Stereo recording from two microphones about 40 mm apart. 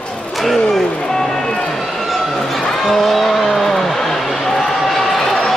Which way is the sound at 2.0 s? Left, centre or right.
Centre.